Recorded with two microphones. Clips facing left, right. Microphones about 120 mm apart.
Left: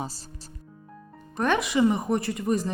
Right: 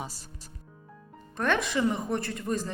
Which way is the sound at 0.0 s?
30° left (ahead or behind).